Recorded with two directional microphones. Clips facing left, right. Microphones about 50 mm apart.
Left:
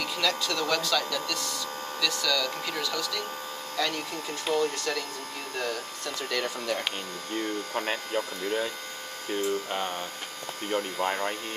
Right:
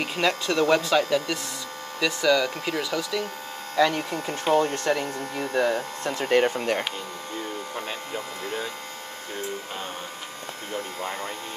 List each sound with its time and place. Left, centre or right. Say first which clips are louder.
0.0 s speech: right 4 dB; right
3.7 s speech: right 8 dB; right